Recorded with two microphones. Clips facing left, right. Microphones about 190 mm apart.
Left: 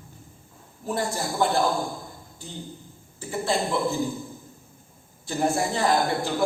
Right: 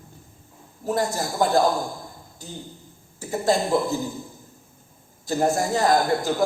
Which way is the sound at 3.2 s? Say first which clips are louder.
Right 4 dB; 40° right (ahead or behind).